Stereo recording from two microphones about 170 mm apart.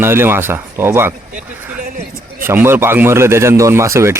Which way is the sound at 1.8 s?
60° right (ahead or behind).